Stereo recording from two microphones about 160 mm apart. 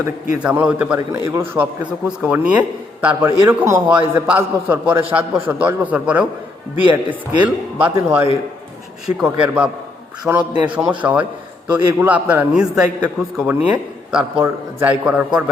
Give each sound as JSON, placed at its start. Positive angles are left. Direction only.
{"t": 0.3, "sound": "a man's voice", "side_deg": -5}
{"t": 15.0, "sound": "a man's voice", "side_deg": -5}